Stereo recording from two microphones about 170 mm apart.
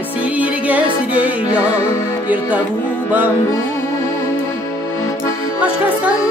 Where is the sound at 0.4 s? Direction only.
10° right (ahead or behind).